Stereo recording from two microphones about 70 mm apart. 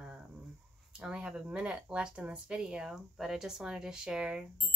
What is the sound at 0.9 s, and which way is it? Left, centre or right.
Speech, centre.